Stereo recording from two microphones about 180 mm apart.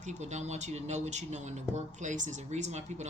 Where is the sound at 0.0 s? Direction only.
40° right (ahead or behind).